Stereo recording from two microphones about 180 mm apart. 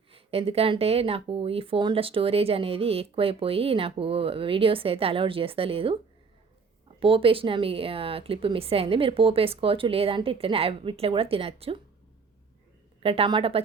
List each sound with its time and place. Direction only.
0.1 s speech: 30° right (ahead or behind)
7.0 s speech: 30° right (ahead or behind)
13.0 s speech: 30° right (ahead or behind)